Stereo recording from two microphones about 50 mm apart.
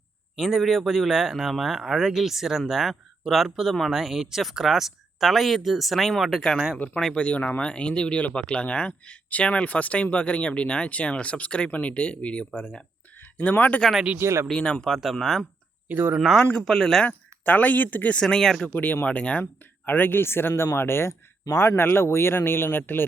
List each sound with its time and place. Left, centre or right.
0.3 s speech: centre
6.7 s speech: left
13.3 s speech: left
14.2 s speech: right
14.5 s speech: centre
15.9 s speech: right
16.1 s speech: centre
16.4 s speech: centre
16.6 s speech: centre
17.1 s speech: left
18.2 s speech: centre
18.7 s speech: left
19.0 s speech: left
19.8 s speech: left